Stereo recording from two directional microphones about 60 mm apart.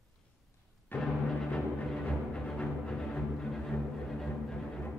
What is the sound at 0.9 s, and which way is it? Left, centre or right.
Music, left.